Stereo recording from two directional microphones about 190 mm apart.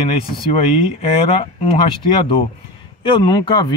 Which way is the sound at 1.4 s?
30° left (ahead or behind).